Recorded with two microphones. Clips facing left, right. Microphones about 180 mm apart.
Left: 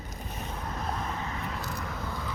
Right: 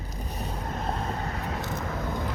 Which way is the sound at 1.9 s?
55° right (ahead or behind).